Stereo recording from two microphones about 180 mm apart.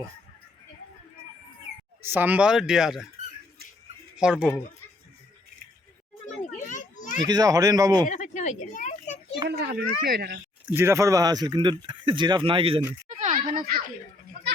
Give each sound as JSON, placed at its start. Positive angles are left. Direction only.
{"t": 2.0, "sound": "speech", "side_deg": -10}
{"t": 4.2, "sound": "speech", "side_deg": -5}
{"t": 7.0, "sound": "children playing", "side_deg": 45}
{"t": 7.3, "sound": "speech", "side_deg": -20}
{"t": 8.0, "sound": "a sound", "side_deg": 45}
{"t": 9.5, "sound": "speech", "side_deg": -65}
{"t": 10.7, "sound": "speech", "side_deg": -15}
{"t": 13.1, "sound": "a sound", "side_deg": -40}
{"t": 13.5, "sound": "speech", "side_deg": -50}